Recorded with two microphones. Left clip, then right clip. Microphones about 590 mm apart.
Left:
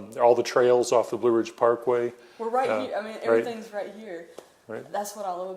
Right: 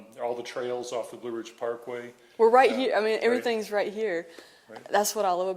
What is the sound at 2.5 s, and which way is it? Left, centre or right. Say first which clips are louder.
A woman's voice: right 3 dB; right.